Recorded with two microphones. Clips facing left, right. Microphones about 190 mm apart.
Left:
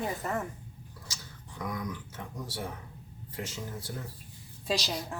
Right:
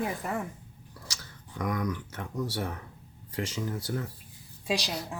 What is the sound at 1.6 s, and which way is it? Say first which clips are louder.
Speech: right 5 dB; 75° right (ahead or behind).